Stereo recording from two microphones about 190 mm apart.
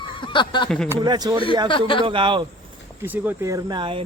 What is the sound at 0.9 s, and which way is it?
Speech, 20° right (ahead or behind).